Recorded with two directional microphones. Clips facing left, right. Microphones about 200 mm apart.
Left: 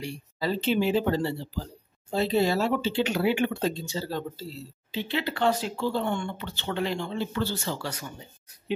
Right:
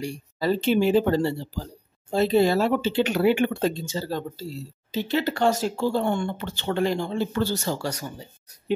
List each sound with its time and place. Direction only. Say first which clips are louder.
0.0 s speech: right 4 dB; 45° right (ahead or behind)
4.9 s speech: right 5 dB; 45° right (ahead or behind)